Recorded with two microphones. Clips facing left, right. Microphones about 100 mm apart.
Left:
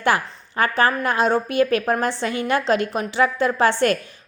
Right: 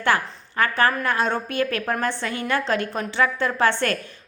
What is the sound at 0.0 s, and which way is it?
A woman's voice, 20° left (ahead or behind).